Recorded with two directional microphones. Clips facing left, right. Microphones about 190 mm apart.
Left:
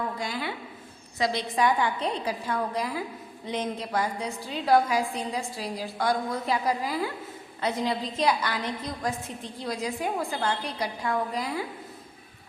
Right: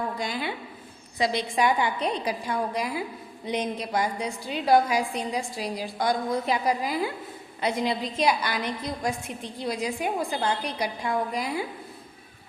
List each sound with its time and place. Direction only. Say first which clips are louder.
0.2 s a woman's voice: right 2 dB; 15° right (ahead or behind)